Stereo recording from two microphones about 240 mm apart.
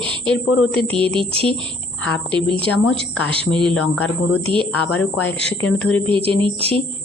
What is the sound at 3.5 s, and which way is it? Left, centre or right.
Speech, centre.